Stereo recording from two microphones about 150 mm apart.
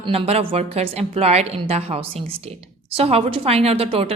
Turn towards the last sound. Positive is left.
turn(degrees=-40)  # may be behind; listen again after turning